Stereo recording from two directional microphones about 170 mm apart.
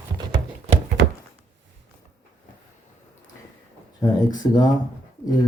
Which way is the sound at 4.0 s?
25° left (ahead or behind).